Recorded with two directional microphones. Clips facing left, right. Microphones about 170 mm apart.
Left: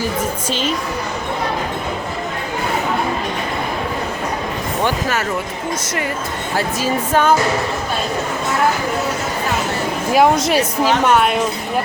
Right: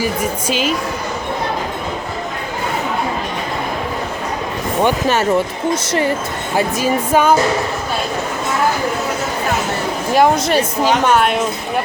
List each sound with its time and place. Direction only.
0.0 s speech: 10° right (ahead or behind)
4.8 s a woman's voice: 20° right (ahead or behind)
6.6 s speech: 15° right (ahead or behind)
10.2 s a woman's voice: centre (ahead or behind)